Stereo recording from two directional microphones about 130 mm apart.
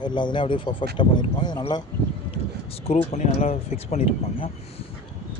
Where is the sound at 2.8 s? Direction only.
60° left (ahead or behind).